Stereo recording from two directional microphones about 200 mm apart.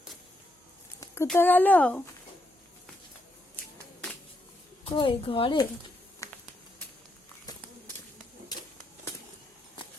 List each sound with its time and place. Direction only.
0.9 s speech: 15° left (ahead or behind)
4.9 s speech: 25° left (ahead or behind)
6.2 s a sound: 15° left (ahead or behind)